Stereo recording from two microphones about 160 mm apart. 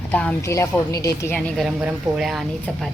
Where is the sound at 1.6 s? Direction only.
5° right (ahead or behind).